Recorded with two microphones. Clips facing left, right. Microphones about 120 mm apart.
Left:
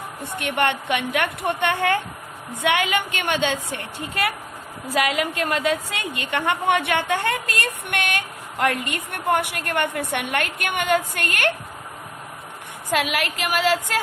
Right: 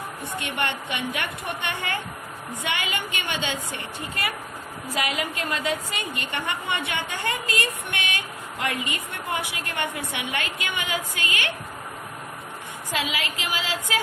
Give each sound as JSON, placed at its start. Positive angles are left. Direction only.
{"t": 0.3, "sound": "a woman's voice", "side_deg": 65}
{"t": 12.9, "sound": "a woman's voice", "side_deg": 60}